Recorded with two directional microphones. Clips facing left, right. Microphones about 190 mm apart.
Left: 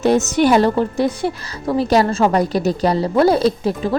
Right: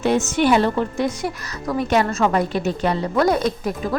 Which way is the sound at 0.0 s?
40° left (ahead or behind).